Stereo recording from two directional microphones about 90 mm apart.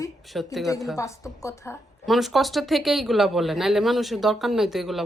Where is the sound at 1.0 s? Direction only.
35° left (ahead or behind).